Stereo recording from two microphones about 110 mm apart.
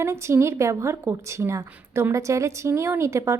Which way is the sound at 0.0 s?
25° right (ahead or behind).